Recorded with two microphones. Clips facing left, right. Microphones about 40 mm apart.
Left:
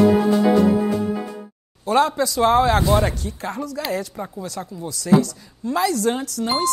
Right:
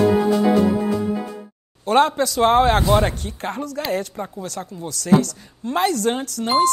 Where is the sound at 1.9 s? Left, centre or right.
Right.